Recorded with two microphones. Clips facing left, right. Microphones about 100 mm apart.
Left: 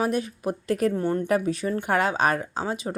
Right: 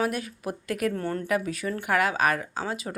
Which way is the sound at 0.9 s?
20° left (ahead or behind).